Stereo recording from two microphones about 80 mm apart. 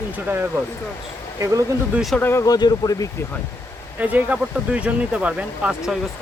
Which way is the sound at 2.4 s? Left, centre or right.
Left.